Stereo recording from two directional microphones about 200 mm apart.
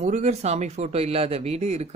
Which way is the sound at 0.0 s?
35° right (ahead or behind).